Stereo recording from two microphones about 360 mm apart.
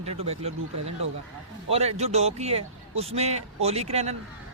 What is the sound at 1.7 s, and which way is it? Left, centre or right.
A man's voice, centre.